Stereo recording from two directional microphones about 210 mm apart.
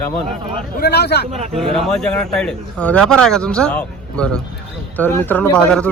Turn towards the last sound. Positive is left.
turn(degrees=5)  # may be behind; listen again after turning